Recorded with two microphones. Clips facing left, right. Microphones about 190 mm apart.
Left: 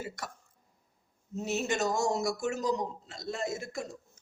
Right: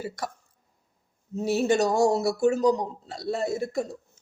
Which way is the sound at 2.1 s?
35° right (ahead or behind).